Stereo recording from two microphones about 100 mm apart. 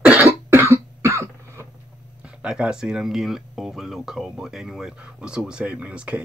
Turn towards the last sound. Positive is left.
turn(degrees=-15)  # may be behind; listen again after turning